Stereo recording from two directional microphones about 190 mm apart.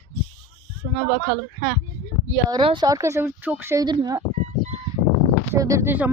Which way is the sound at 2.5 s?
25° right (ahead or behind).